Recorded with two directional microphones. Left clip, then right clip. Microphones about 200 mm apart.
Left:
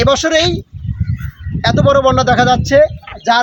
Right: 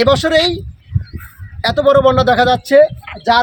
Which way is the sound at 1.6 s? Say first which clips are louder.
Right 1 dB; 15° right (ahead or behind).